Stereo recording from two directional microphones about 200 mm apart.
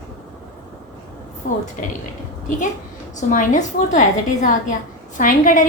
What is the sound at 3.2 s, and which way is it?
A woman's voice, 40° left (ahead or behind).